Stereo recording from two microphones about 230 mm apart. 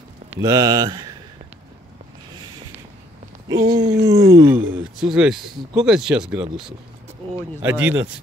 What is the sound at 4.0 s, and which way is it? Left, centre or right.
Speech, centre.